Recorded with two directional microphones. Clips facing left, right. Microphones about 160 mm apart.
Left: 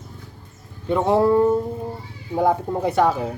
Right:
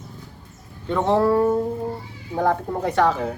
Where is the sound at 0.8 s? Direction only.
10° left (ahead or behind).